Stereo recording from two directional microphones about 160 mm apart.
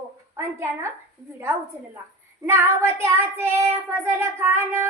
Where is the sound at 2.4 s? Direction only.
15° right (ahead or behind).